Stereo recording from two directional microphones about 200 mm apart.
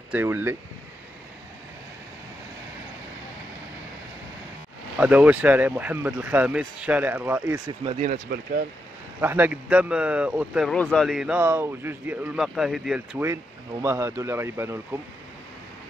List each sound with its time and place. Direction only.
0.1 s speech: 10° right (ahead or behind)
4.9 s speech: 5° right (ahead or behind)
7.8 s speech: 25° right (ahead or behind)
9.2 s speech: 10° right (ahead or behind)